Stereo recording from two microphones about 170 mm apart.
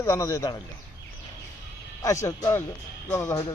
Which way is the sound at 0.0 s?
15° left (ahead or behind).